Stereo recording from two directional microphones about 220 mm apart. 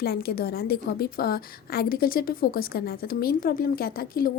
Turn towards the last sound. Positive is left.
turn(degrees=40)  # may be behind; listen again after turning